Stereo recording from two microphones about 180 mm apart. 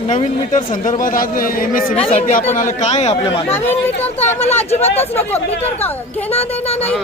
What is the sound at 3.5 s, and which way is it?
Speech, 10° left (ahead or behind).